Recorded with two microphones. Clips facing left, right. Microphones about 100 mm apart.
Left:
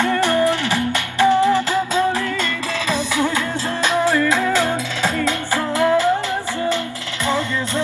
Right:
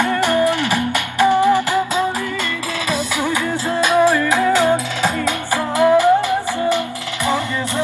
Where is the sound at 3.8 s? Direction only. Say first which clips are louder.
Right 3 dB; 15° right (ahead or behind).